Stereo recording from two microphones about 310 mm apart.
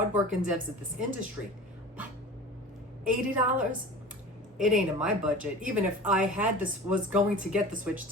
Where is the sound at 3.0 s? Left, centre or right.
Centre.